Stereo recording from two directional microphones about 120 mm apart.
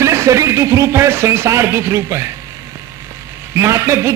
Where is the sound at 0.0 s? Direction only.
25° right (ahead or behind).